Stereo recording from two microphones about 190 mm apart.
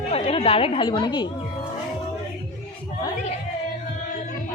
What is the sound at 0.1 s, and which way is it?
A woman's voice, 30° left (ahead or behind).